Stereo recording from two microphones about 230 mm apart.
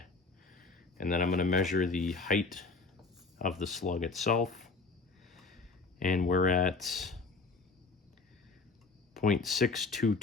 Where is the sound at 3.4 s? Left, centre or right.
Left.